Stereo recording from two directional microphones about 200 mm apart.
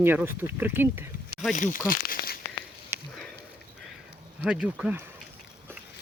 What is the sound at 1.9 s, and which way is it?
Crumpling, 45° left (ahead or behind).